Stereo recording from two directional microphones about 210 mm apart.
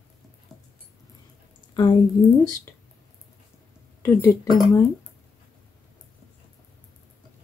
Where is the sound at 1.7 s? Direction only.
20° left (ahead or behind).